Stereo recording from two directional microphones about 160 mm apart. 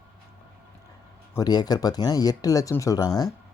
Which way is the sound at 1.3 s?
25° left (ahead or behind).